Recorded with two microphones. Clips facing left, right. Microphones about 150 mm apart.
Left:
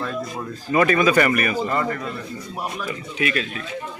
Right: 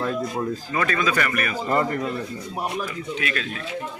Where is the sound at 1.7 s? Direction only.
30° right (ahead or behind).